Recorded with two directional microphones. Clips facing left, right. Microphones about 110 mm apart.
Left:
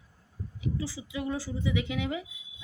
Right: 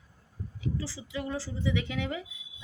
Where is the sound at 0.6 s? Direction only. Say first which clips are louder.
Left 1 dB; 15° left (ahead or behind).